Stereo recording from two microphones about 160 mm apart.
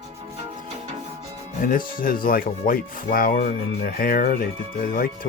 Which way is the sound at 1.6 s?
60° left (ahead or behind).